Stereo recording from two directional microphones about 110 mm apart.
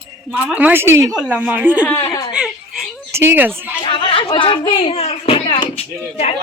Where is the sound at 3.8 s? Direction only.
50° left (ahead or behind); by 6.3 s 65° left (ahead or behind).